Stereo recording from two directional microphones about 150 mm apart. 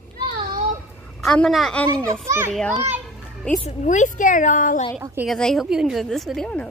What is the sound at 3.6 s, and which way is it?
A woman's voice, 55° left (ahead or behind).